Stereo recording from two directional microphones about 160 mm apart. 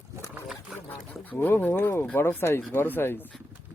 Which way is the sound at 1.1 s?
10° left (ahead or behind).